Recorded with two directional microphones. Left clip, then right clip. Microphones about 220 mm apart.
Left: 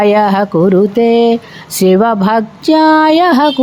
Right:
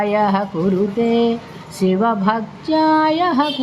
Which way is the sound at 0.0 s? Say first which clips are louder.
Left 8 dB; 50° left (ahead or behind).